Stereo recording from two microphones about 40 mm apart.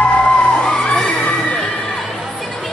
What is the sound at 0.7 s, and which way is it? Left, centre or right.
Children shouting, left.